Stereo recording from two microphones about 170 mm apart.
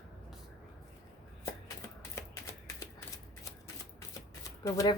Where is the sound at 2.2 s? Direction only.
15° left (ahead or behind).